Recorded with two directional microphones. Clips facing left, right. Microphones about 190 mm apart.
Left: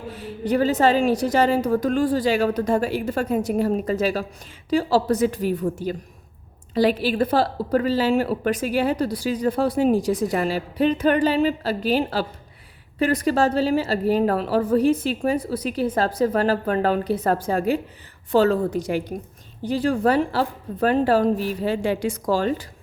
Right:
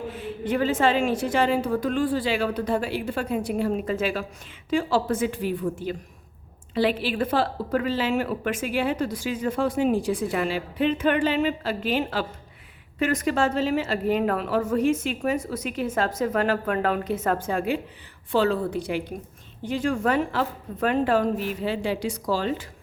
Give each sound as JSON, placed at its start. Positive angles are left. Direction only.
{"t": 0.1, "sound": "a woman's voice", "side_deg": 40}